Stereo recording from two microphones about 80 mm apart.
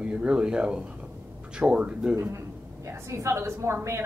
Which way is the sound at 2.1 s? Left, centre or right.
Right.